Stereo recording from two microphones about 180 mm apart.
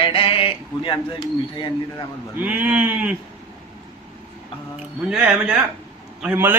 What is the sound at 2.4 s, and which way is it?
Speech, 10° right (ahead or behind).